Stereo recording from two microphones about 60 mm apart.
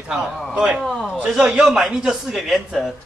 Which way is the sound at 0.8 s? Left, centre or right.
Centre.